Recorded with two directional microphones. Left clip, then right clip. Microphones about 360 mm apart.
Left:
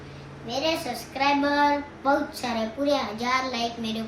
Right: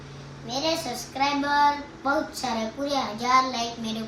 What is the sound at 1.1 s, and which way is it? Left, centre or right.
A child's voice, centre.